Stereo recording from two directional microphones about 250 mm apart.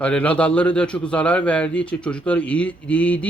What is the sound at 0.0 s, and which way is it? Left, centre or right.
A man's voice, centre.